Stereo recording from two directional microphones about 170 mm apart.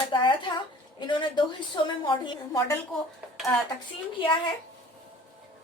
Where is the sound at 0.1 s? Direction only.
25° left (ahead or behind).